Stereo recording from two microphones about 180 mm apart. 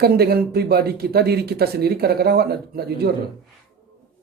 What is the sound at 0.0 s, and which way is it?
A man's voice, 60° right (ahead or behind).